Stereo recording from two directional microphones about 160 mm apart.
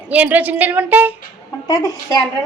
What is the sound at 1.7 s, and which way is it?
Speech, 25° left (ahead or behind).